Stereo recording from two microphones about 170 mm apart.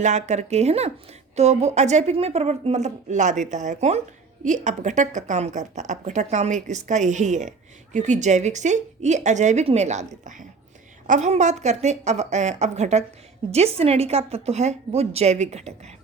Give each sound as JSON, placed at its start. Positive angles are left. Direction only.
{"t": 0.0, "sound": "a woman's voice", "side_deg": -45}